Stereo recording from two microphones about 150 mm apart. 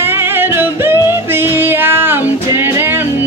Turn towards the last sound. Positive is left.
turn(degrees=-15)  # may be behind; listen again after turning